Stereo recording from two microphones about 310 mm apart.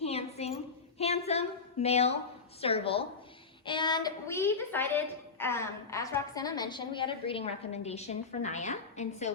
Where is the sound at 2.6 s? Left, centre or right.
Centre.